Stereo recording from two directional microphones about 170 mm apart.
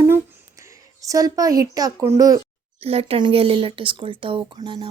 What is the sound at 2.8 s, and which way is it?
Speech, 35° right (ahead or behind).